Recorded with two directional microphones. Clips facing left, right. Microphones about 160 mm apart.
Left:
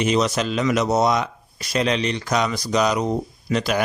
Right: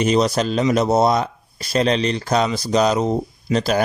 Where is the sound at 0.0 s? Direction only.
35° right (ahead or behind).